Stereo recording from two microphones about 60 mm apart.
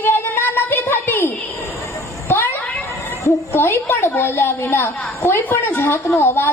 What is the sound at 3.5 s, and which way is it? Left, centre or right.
A woman's voice, left.